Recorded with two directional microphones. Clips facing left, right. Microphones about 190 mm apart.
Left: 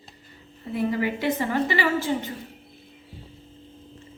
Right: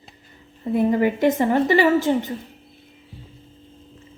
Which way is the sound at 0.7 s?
50° right (ahead or behind).